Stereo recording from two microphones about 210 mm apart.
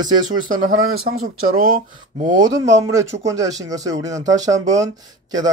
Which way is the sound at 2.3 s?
15° right (ahead or behind).